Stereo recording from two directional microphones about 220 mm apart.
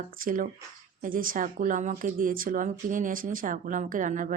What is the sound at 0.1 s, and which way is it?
Speech, 40° right (ahead or behind).